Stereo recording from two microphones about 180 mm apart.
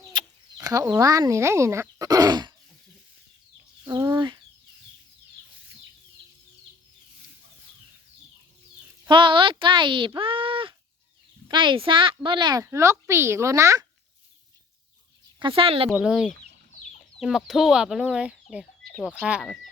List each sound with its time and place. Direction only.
0.1 s speech: 25° right (ahead or behind)
3.8 s chicken: 20° right (ahead or behind)
9.0 s a sound: 25° right (ahead or behind)
11.4 s speech: 25° right (ahead or behind)
15.4 s speech: 30° right (ahead or behind)
15.9 s speech: 5° right (ahead or behind)